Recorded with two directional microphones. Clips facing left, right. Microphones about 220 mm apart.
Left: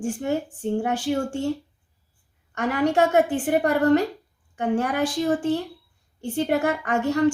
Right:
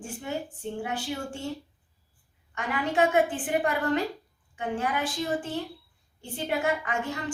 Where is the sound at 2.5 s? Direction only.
40° left (ahead or behind).